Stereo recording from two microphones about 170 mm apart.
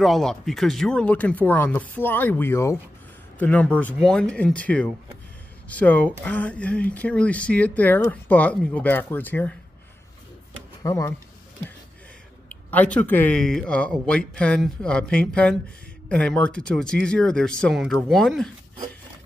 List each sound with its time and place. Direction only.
0.0 s speech: centre (ahead or behind)
10.8 s speech: 20° left (ahead or behind)
12.7 s speech: 10° left (ahead or behind)